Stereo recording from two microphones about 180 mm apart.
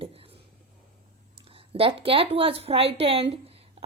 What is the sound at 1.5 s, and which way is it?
A woman's voice, 30° right (ahead or behind).